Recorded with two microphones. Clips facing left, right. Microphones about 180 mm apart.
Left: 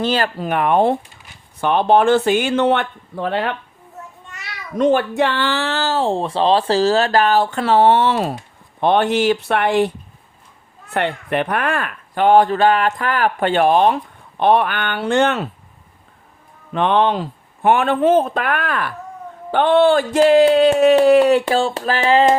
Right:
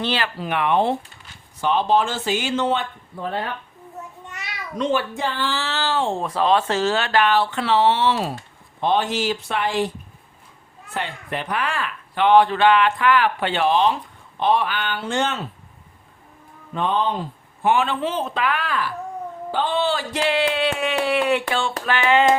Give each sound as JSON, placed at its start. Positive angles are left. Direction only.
{"t": 0.0, "sound": "speech", "side_deg": 45}
{"t": 1.6, "sound": "speech", "side_deg": 60}
{"t": 4.8, "sound": "speech", "side_deg": 50}
{"t": 5.1, "sound": "speech", "side_deg": 70}
{"t": 10.9, "sound": "speech", "side_deg": 65}
{"t": 16.7, "sound": "speech", "side_deg": 75}
{"t": 21.7, "sound": "a sound", "side_deg": 35}